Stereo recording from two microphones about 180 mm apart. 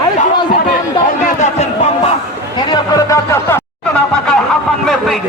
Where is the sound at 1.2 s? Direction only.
40° left (ahead or behind).